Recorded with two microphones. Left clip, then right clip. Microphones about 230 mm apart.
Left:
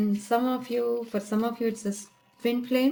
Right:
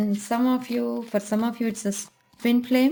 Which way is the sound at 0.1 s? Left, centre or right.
Right.